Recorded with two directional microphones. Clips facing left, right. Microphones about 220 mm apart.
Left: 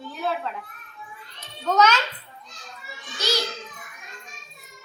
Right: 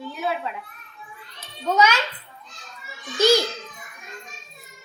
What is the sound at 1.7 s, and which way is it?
Music, 10° right (ahead or behind).